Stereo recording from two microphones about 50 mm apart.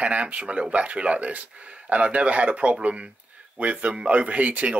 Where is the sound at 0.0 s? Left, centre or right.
Right.